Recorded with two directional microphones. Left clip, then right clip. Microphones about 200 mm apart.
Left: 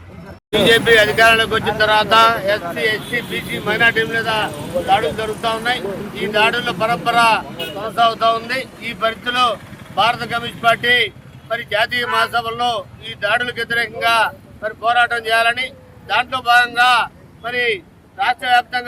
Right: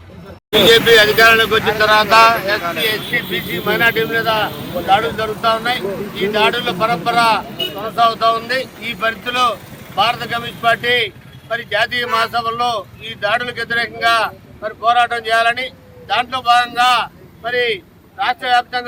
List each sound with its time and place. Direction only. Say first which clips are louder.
0.7 s speech: right 2 dB; 25° left (ahead or behind)
2.9 s speech: right 2 dB; centre (ahead or behind)